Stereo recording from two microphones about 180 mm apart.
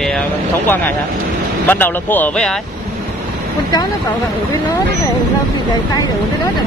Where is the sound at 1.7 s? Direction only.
10° left (ahead or behind).